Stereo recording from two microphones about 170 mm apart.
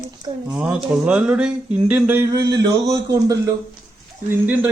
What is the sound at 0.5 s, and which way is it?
Speech, 5° right (ahead or behind).